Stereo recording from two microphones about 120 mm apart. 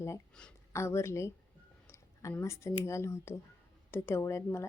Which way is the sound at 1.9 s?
25° left (ahead or behind).